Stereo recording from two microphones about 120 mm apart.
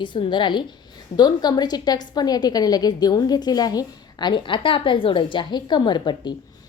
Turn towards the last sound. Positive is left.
turn(degrees=40)  # may be behind; listen again after turning